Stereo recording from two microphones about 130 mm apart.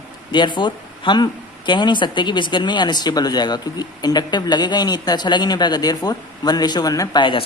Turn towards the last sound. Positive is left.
turn(degrees=40)  # may be behind; listen again after turning